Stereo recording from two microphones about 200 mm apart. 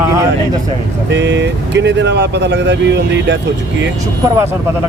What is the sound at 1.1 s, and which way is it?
Speech, 60° right (ahead or behind).